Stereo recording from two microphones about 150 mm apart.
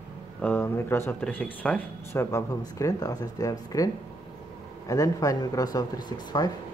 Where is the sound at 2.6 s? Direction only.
25° left (ahead or behind).